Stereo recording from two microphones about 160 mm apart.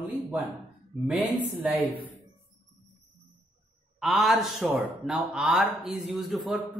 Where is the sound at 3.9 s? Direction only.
Centre (ahead or behind).